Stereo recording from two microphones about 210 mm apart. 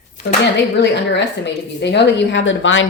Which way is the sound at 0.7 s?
55° left (ahead or behind).